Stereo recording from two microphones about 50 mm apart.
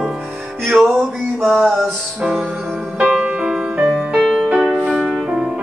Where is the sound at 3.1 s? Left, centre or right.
Right.